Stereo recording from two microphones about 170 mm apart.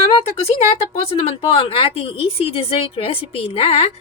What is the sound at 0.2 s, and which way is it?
Speech, 35° left (ahead or behind).